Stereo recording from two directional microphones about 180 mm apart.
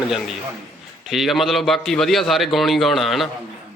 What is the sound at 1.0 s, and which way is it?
A man's voice, centre (ahead or behind).